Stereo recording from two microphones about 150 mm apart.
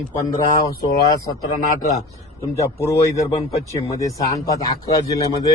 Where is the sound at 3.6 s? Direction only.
20° left (ahead or behind).